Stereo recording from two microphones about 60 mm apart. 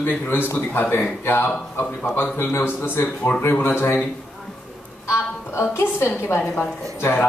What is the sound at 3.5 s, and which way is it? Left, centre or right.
Speech, left.